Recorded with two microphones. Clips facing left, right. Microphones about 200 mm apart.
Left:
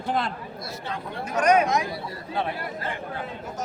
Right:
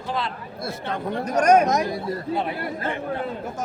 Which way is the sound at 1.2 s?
40° right (ahead or behind).